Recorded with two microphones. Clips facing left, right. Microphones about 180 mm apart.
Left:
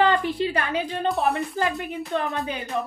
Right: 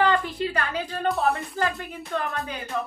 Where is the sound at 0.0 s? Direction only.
20° left (ahead or behind).